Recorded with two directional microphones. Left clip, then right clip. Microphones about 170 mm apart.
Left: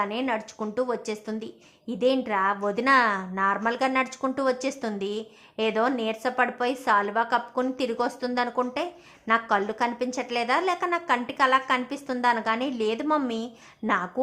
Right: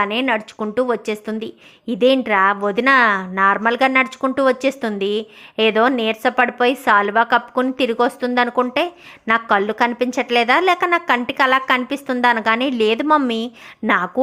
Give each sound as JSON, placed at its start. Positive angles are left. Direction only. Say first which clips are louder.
{"t": 0.0, "sound": "speech", "louder": "right 9 dB", "side_deg": -25}